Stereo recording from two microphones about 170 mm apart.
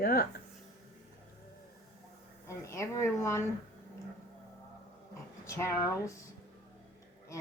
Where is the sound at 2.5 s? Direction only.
15° left (ahead or behind).